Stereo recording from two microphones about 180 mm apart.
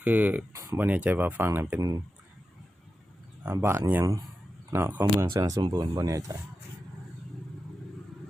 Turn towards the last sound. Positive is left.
turn(degrees=-20)  # may be behind; listen again after turning